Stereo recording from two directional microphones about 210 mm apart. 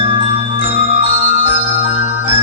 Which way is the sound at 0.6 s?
35° right (ahead or behind).